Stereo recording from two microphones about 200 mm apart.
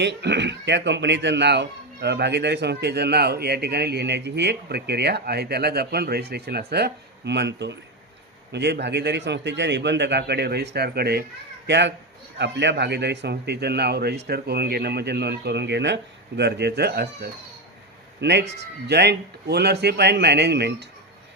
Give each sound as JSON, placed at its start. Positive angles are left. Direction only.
{"t": 0.0, "sound": "a child's voice", "side_deg": -60}